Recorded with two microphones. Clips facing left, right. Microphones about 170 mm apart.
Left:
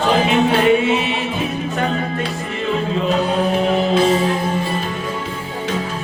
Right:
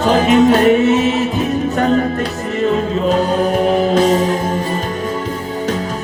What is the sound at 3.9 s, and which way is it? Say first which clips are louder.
Music: right 2 dB; 45° right (ahead or behind).